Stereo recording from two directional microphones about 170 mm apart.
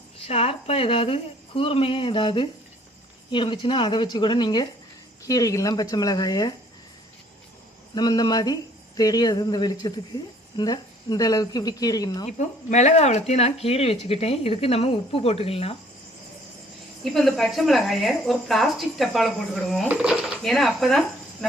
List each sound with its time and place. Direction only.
0.3 s speech: 35° left (ahead or behind)
7.9 s speech: 25° left (ahead or behind)
12.2 s speech: 40° left (ahead or behind)
17.0 s speech: centre (ahead or behind)